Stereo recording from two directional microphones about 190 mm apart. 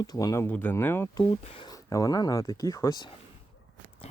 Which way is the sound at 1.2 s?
25° left (ahead or behind).